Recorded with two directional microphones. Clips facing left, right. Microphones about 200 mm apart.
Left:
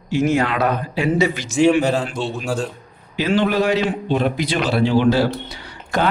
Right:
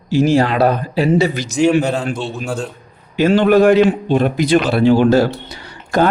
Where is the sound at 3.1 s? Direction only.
50° right (ahead or behind).